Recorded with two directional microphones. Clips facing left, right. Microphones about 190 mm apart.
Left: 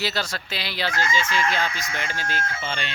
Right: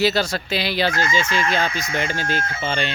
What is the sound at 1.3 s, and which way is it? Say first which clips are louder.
Speech: right 3 dB; 20° right (ahead or behind).